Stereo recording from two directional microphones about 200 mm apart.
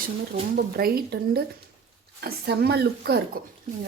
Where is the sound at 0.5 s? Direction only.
50° right (ahead or behind).